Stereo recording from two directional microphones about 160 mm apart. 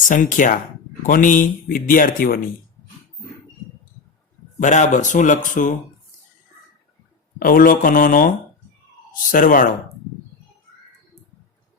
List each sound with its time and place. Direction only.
0.1 s speech: 55° left (ahead or behind)
4.6 s speech: 50° left (ahead or behind)
7.3 s speech: 60° left (ahead or behind)
9.3 s speech: 60° left (ahead or behind)